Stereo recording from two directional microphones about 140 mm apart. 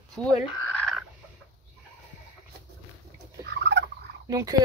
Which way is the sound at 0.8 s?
5° left (ahead or behind).